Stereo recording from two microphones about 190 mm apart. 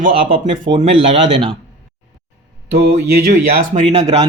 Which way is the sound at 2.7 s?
55° right (ahead or behind).